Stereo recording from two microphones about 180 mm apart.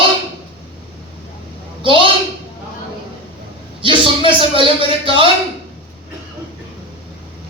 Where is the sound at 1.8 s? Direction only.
30° right (ahead or behind).